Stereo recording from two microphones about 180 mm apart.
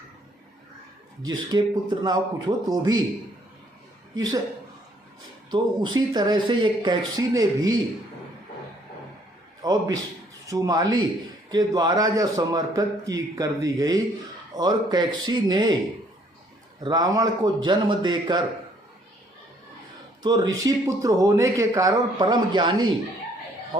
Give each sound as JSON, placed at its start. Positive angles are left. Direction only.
{"t": 1.2, "sound": "speech", "side_deg": -20}
{"t": 4.1, "sound": "a woman's voice", "side_deg": -20}
{"t": 5.5, "sound": "speech", "side_deg": -25}
{"t": 9.6, "sound": "a man's voice", "side_deg": -20}
{"t": 16.8, "sound": "speech", "side_deg": -20}
{"t": 20.2, "sound": "speech", "side_deg": -20}